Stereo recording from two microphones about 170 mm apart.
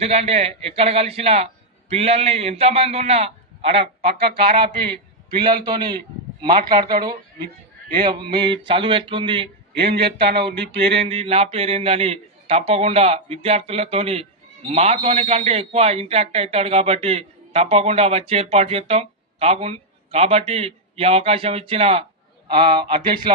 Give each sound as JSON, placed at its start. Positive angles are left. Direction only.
{"t": 0.0, "sound": "a man's voice", "side_deg": -35}
{"t": 4.0, "sound": "speech", "side_deg": -65}
{"t": 4.4, "sound": "a man's voice", "side_deg": -30}
{"t": 9.7, "sound": "speech", "side_deg": -70}
{"t": 10.9, "sound": "a man's voice", "side_deg": -35}